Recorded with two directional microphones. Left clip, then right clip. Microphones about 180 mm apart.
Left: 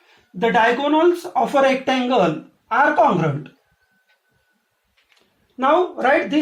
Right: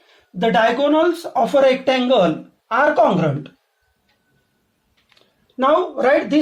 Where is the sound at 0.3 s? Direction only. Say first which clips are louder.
Right 1 dB; 55° right (ahead or behind).